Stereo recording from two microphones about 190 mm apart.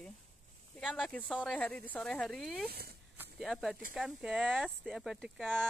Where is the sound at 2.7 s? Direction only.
55° right (ahead or behind).